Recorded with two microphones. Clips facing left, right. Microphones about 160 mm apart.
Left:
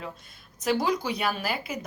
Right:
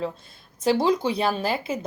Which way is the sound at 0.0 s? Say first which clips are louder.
Right 9 dB; 30° right (ahead or behind).